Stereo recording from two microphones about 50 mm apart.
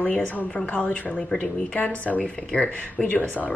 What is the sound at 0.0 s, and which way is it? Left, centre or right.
Speech, left.